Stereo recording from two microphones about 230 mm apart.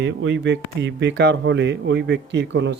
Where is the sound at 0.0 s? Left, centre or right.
Right.